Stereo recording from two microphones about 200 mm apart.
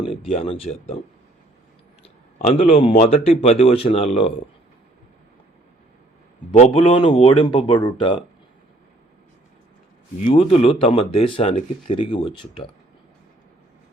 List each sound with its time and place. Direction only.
0.0 s a sound: 25° left (ahead or behind)
0.3 s speech: 30° left (ahead or behind)
2.4 s speech: 30° left (ahead or behind)
6.5 s speech: 30° left (ahead or behind)
10.2 s speech: 30° left (ahead or behind)